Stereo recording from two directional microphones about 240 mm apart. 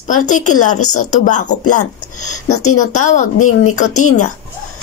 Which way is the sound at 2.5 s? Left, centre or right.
Left.